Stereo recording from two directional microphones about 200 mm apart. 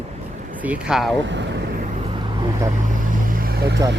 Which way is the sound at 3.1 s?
45° right (ahead or behind).